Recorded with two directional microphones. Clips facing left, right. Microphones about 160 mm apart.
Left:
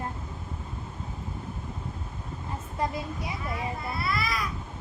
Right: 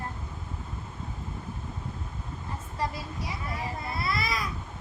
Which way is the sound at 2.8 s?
20° left (ahead or behind).